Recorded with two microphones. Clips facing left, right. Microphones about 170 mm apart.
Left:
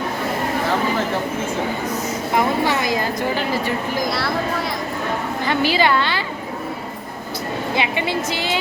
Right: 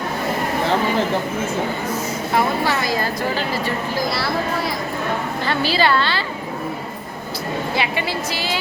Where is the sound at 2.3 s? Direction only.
15° left (ahead or behind).